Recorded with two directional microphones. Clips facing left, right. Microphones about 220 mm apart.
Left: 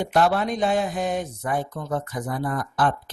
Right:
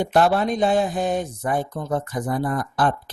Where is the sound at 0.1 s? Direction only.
35° right (ahead or behind).